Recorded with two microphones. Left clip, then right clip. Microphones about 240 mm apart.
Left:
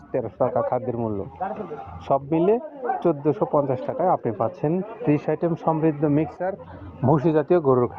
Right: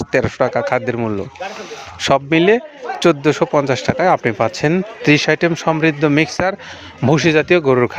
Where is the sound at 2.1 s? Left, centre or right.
Right.